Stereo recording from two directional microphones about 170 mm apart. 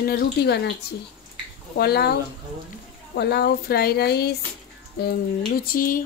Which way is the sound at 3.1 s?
70° left (ahead or behind).